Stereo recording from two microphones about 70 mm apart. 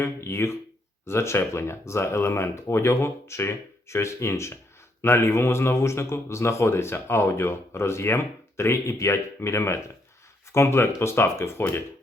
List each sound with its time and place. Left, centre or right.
0.0 s a man's voice: left